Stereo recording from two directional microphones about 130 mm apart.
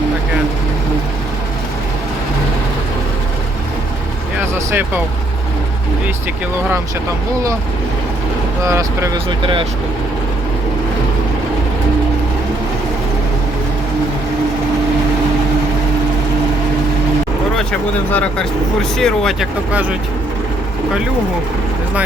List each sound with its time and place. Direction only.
4.4 s a sound: 15° right (ahead or behind)
8.6 s speech: 25° right (ahead or behind)
9.4 s speech: 40° right (ahead or behind)
17.6 s speech: 5° left (ahead or behind)